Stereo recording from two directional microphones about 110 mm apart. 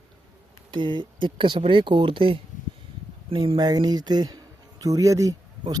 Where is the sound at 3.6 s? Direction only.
40° right (ahead or behind).